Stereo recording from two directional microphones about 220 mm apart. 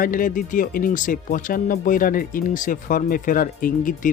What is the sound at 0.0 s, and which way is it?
Speech, 40° left (ahead or behind).